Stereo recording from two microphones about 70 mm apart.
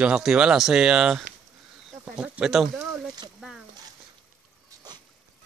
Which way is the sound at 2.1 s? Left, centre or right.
Centre.